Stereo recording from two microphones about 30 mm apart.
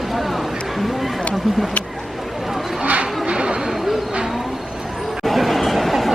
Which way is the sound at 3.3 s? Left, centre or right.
Right.